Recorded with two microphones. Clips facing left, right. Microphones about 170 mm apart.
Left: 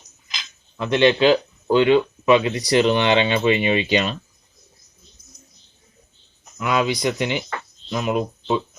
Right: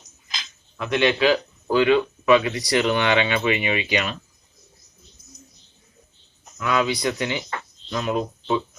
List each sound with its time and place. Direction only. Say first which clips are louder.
0.8 s speech: left 4 dB; 25° left (ahead or behind)
6.6 s speech: left 1 dB; 15° left (ahead or behind)